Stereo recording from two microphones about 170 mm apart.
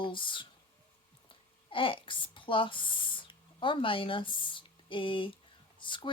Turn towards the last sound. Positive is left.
turn(degrees=30)  # may be behind; listen again after turning